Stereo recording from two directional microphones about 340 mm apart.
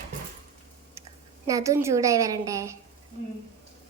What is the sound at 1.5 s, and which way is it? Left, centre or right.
A child's voice, centre.